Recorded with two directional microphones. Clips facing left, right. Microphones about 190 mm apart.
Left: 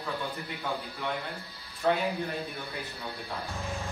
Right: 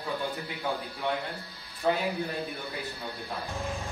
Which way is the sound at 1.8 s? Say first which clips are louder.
Even; 10° right (ahead or behind).